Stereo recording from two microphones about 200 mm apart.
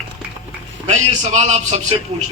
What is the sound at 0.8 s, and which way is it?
A man's voice, 35° right (ahead or behind).